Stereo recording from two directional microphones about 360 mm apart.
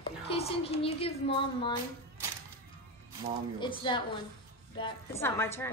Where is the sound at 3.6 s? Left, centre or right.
Centre.